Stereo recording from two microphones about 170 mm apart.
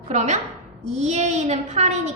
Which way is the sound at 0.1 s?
40° right (ahead or behind).